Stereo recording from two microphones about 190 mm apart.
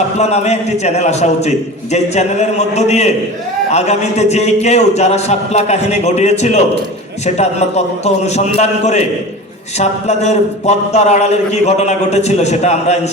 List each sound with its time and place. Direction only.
0.2 s a man's voice: 35° left (ahead or behind)
8.0 s a man's voice: 35° left (ahead or behind)